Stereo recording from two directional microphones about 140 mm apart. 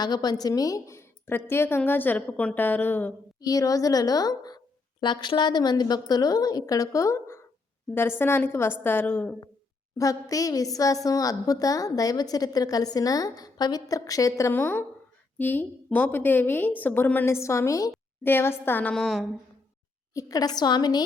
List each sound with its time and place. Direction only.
0.0 s a woman's voice: 30° left (ahead or behind); by 3.1 s 15° left (ahead or behind)
3.4 s a woman's voice: 25° left (ahead or behind); by 19.3 s centre (ahead or behind)
20.1 s a woman's voice: 25° left (ahead or behind)